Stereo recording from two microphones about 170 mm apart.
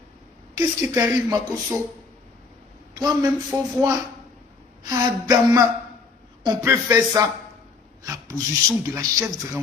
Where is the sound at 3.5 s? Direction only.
15° right (ahead or behind).